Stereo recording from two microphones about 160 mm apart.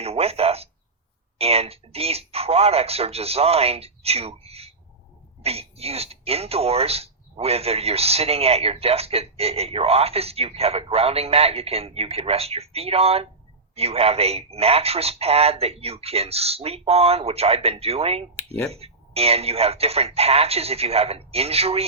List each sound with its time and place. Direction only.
0.0 s speech: 40° right (ahead or behind)
18.3 s speech: 10° left (ahead or behind)
18.7 s speech: 40° right (ahead or behind)